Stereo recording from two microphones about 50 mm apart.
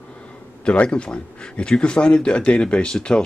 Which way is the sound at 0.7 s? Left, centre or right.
Left.